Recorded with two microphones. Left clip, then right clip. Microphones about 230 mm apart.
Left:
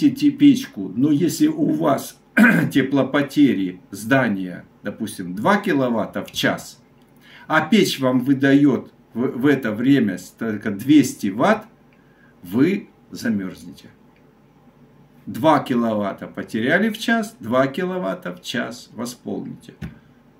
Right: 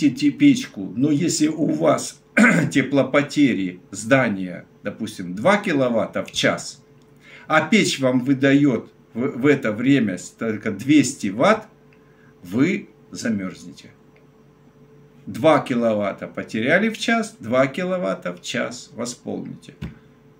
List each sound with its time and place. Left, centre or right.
0.4 s speech: centre
7.2 s a sound: centre
8.0 s speech: centre
15.4 s speech: centre